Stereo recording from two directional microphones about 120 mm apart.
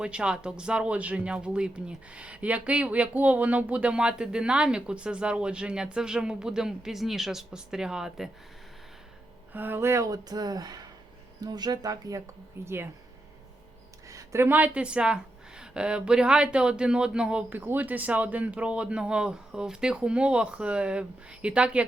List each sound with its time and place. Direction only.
0.0 s speech: 10° right (ahead or behind)
9.5 s speech: 15° right (ahead or behind)
14.1 s speech: 25° right (ahead or behind)